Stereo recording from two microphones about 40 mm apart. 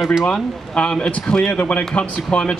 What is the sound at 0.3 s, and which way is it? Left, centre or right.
A man's voice, left.